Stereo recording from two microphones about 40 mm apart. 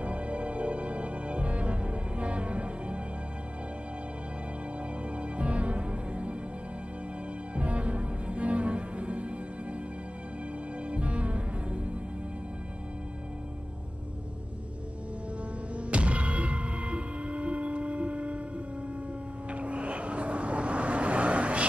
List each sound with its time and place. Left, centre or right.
0.0 s music: right
5.1 s music: right
7.5 s music: right
10.9 s music: right
15.7 s music: right
19.5 s vehicle: right